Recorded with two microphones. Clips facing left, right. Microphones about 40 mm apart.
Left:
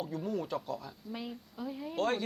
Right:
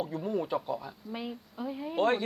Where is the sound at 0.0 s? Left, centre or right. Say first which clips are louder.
Right 4 dB; centre.